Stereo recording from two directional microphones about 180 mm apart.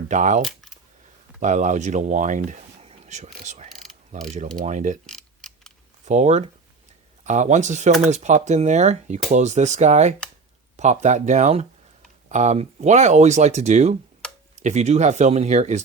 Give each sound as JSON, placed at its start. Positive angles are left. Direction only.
{"t": 0.1, "sound": "speech", "side_deg": -45}
{"t": 0.4, "sound": "a sound", "side_deg": 0}
{"t": 1.4, "sound": "speech", "side_deg": -45}
{"t": 5.0, "sound": "tick", "side_deg": 5}
{"t": 6.1, "sound": "speech", "side_deg": -40}